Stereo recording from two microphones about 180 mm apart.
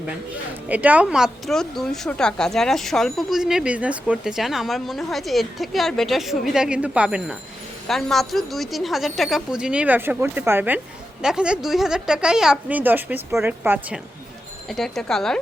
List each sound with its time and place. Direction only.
0.7 s a woman's voice: 10° right (ahead or behind)
14.7 s a woman's voice: centre (ahead or behind)